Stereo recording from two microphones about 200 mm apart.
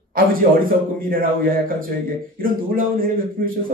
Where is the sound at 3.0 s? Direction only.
45° right (ahead or behind).